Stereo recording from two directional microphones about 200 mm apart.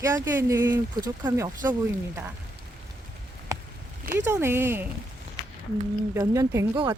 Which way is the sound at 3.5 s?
15° right (ahead or behind).